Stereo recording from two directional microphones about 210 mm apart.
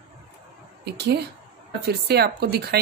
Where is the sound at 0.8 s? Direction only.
50° right (ahead or behind).